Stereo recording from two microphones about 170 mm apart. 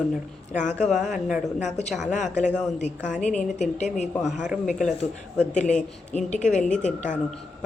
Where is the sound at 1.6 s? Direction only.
40° left (ahead or behind).